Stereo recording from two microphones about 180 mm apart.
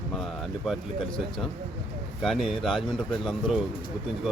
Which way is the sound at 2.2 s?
Centre (ahead or behind).